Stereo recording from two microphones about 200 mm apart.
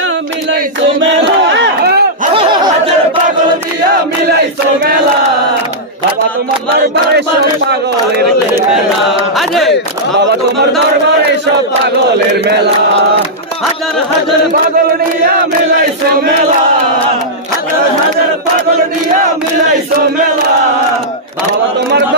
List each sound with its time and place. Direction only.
1.0 s battle cry: 65° right (ahead or behind)
2.3 s a sound: 25° right (ahead or behind)
9.4 s speech: centre (ahead or behind)